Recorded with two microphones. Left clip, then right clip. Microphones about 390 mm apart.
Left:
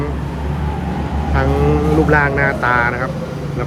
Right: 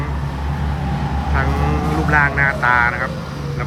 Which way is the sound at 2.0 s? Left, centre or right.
Centre.